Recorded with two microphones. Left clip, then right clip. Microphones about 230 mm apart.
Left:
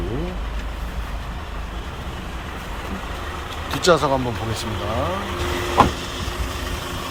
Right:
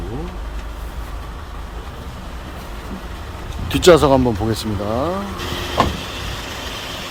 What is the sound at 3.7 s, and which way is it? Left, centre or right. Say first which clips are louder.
Speech: right 6 dB; right.